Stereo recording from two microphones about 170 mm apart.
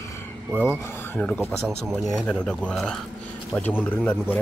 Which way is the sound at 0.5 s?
10° right (ahead or behind).